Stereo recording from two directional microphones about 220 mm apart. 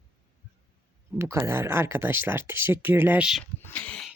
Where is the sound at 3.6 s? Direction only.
5° left (ahead or behind).